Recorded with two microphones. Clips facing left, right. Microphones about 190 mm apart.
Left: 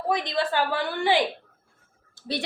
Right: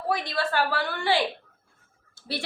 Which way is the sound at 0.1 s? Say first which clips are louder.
Left 2 dB; 20° left (ahead or behind).